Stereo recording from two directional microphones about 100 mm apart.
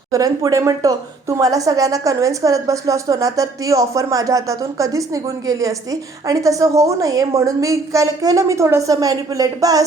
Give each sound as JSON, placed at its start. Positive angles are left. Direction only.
{"t": 0.1, "sound": "speech", "side_deg": -35}